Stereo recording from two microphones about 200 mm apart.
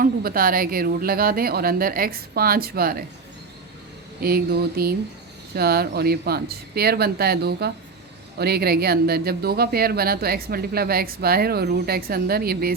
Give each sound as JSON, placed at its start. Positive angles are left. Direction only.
{"t": 0.0, "sound": "speech", "side_deg": -45}
{"t": 4.2, "sound": "speech", "side_deg": -50}